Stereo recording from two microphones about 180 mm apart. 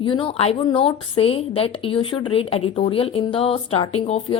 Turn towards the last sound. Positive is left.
turn(degrees=30)  # may be behind; listen again after turning